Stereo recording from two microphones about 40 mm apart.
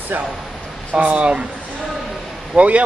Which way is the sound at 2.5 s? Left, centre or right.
Right.